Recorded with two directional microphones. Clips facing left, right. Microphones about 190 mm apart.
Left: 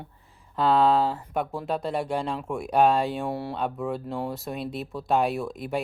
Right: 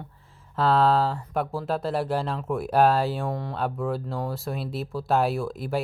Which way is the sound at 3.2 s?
10° left (ahead or behind).